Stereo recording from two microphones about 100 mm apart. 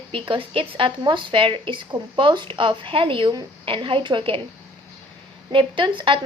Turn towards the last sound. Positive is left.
turn(degrees=-55)  # may be behind; listen again after turning